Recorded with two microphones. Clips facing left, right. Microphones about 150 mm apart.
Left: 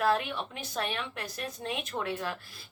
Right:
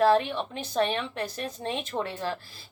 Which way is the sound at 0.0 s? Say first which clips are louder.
Right 6 dB; 35° right (ahead or behind).